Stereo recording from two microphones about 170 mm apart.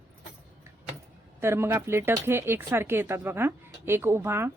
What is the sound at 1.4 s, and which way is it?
Speech, 15° right (ahead or behind).